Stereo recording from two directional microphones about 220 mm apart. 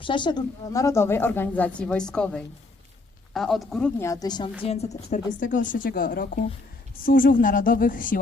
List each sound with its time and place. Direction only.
0.0 s a woman's voice: 20° left (ahead or behind); by 4.1 s 5° left (ahead or behind)
4.1 s a woman's voice: 20° left (ahead or behind); by 8.2 s 40° left (ahead or behind)